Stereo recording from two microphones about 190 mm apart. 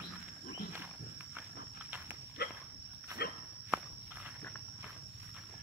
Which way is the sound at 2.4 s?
55° left (ahead or behind).